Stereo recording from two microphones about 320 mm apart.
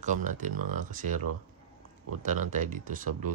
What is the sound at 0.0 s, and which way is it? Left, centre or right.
Speech, right.